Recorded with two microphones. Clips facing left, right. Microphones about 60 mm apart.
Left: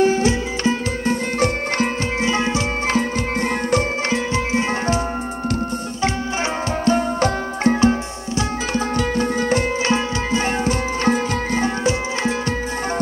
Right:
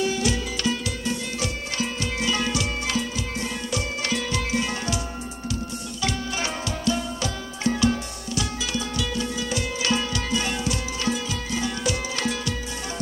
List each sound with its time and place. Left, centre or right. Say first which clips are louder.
0.0 s music: left 8 dB; left
2.2 s music: left 5 dB; left
4.1 s music: left 2 dB; left
6.8 s music: left 9 dB; left